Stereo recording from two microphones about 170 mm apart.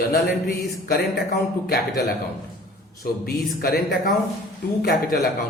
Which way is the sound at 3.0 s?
60° left (ahead or behind).